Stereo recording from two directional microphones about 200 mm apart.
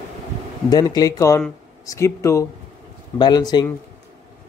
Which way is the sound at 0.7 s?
20° left (ahead or behind).